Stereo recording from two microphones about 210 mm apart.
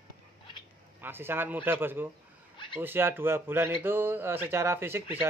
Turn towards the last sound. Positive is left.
turn(degrees=-10)  # may be behind; listen again after turning